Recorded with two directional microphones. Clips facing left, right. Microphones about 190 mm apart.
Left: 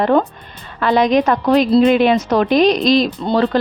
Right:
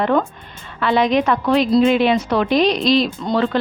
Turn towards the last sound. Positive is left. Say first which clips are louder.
# left 3 dB
turn(degrees=35)  # may be behind; listen again after turning